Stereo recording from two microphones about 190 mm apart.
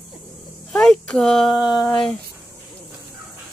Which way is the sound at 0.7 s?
5° left (ahead or behind).